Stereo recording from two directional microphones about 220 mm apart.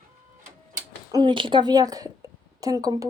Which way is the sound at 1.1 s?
20° right (ahead or behind).